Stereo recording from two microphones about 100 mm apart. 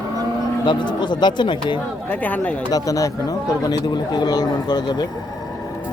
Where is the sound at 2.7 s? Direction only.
35° left (ahead or behind).